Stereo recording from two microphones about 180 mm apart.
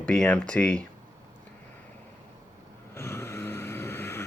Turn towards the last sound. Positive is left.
turn(degrees=15)  # may be behind; listen again after turning